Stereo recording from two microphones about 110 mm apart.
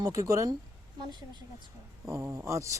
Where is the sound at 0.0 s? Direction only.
30° right (ahead or behind).